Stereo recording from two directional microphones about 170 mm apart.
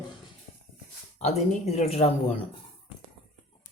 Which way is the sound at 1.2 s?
40° left (ahead or behind).